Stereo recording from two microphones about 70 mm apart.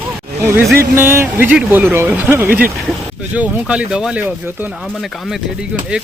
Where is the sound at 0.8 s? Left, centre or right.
Right; by 4.2 s centre.